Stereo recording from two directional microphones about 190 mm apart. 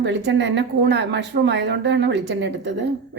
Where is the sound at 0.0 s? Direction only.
65° right (ahead or behind).